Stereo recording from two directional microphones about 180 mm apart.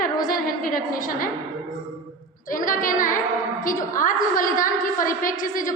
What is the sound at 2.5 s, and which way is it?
A woman's voice, 50° left (ahead or behind).